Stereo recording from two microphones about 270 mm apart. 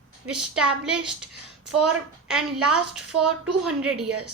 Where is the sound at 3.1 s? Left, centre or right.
Right.